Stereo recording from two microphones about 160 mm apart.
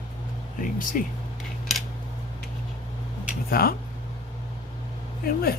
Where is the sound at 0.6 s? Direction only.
55° left (ahead or behind).